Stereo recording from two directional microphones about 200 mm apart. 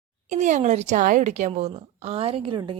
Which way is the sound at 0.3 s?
35° right (ahead or behind).